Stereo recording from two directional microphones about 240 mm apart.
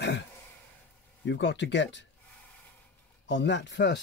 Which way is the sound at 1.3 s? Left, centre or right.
Left.